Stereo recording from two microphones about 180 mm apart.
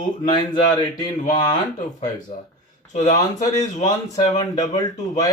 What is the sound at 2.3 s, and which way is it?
Speech, 45° left (ahead or behind).